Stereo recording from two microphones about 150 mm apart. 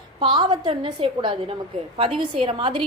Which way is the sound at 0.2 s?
35° right (ahead or behind).